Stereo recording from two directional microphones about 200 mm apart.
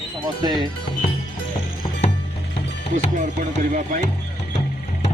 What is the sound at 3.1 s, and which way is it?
Speech, 40° right (ahead or behind).